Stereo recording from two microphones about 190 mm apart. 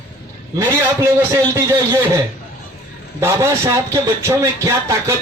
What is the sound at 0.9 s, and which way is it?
Speech, 15° right (ahead or behind).